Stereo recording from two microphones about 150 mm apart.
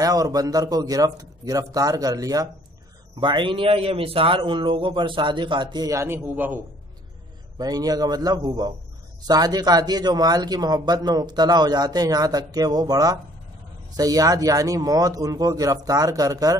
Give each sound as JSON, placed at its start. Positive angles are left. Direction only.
{"t": 0.0, "sound": "speech", "side_deg": -25}
{"t": 7.5, "sound": "speech", "side_deg": -25}